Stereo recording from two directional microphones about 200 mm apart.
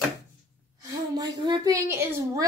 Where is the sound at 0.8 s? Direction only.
20° right (ahead or behind).